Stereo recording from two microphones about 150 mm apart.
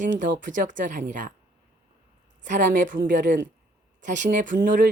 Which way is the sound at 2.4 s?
60° right (ahead or behind).